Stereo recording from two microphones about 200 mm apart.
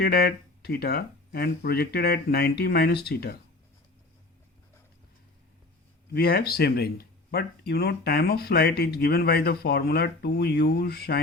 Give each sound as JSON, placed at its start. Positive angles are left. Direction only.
{"t": 0.0, "sound": "speech", "side_deg": 50}
{"t": 6.1, "sound": "speech", "side_deg": 50}